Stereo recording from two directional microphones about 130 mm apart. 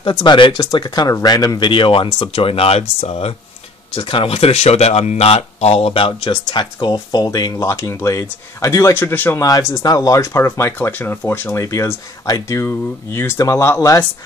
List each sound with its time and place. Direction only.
0.0 s speech: 35° left (ahead or behind)